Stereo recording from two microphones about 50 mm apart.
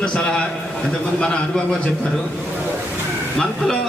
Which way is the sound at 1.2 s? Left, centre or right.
Centre.